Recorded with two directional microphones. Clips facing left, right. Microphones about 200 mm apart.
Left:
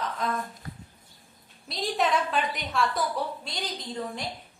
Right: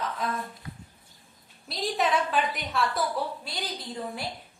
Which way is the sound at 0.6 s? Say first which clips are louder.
Left 1 dB; 45° left (ahead or behind).